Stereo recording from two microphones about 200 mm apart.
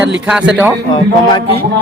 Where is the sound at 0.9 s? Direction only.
20° left (ahead or behind).